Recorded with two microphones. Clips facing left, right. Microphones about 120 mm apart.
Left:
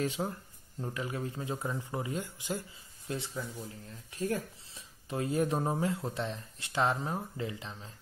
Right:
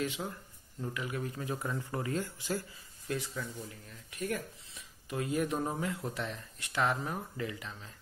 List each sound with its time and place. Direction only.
0.0 s speech: 40° left (ahead or behind)